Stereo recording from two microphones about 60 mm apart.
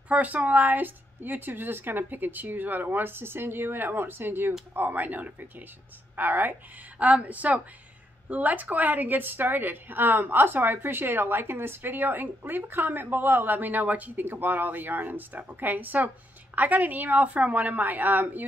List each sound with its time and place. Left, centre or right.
0.1 s a woman's voice: right